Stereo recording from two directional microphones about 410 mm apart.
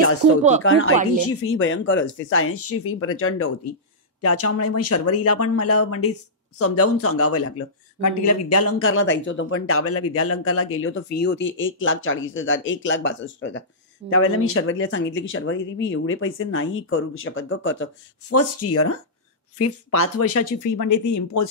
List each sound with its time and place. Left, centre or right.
0.6 s speech: left
20.7 s speech: left